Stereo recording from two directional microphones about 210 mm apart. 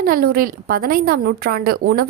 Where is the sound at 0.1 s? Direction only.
45° right (ahead or behind).